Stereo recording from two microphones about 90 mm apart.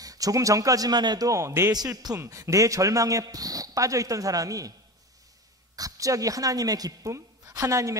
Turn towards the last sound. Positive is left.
turn(degrees=-35)  # may be behind; listen again after turning